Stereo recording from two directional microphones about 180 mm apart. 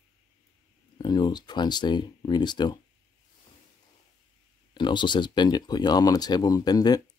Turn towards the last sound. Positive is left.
turn(degrees=20)  # may be behind; listen again after turning